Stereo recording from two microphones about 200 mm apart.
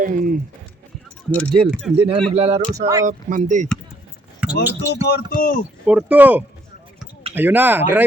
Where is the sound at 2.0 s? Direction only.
30° right (ahead or behind).